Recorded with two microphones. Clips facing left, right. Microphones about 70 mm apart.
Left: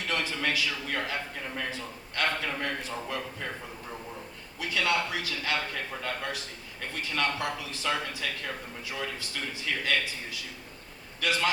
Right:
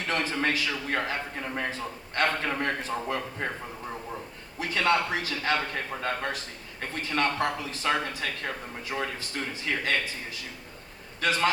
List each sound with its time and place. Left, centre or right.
0.1 s a man's voice: right
4.6 s a man's voice: right
11.2 s a man's voice: right